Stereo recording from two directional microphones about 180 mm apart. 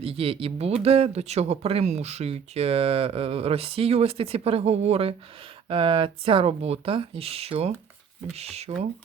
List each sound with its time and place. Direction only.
0.0 s speech: 30° right (ahead or behind)